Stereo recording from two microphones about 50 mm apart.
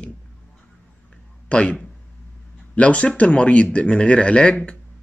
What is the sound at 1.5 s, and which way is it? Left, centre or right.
Speech, left.